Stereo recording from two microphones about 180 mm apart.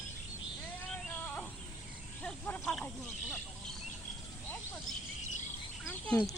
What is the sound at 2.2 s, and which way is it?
Speech, 5° left (ahead or behind).